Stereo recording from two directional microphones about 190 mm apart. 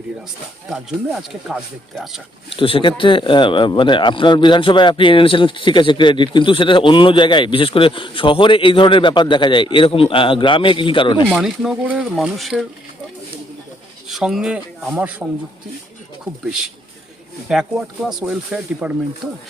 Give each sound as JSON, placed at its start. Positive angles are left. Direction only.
{"t": 0.7, "sound": "speech", "side_deg": 0}
{"t": 2.5, "sound": "speech", "side_deg": 30}
{"t": 11.3, "sound": "speech", "side_deg": 0}
{"t": 14.1, "sound": "speech", "side_deg": 0}
{"t": 17.5, "sound": "speech", "side_deg": 0}